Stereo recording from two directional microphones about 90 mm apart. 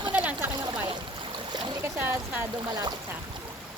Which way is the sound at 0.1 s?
15° right (ahead or behind).